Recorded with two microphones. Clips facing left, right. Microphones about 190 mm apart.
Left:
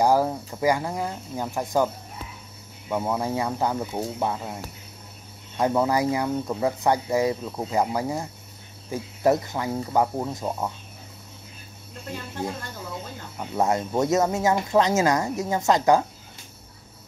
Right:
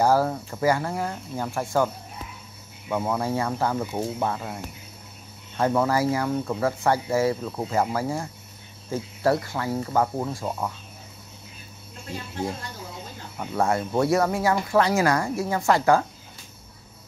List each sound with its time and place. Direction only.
0.0 s speech: 15° left (ahead or behind)
2.9 s speech: 10° left (ahead or behind)
3.8 s speech: 5° right (ahead or behind)
4.2 s speech: 10° left (ahead or behind)
5.6 s speech: 15° left (ahead or behind)
13.6 s speech: 20° left (ahead or behind)